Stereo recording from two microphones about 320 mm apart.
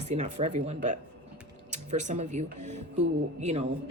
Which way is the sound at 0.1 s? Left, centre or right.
Right.